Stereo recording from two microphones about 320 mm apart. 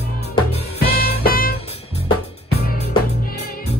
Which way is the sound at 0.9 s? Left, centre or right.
Left.